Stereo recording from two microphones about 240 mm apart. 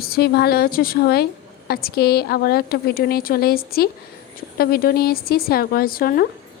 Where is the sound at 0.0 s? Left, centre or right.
Left.